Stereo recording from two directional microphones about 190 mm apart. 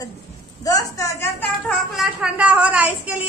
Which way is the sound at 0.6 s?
20° left (ahead or behind).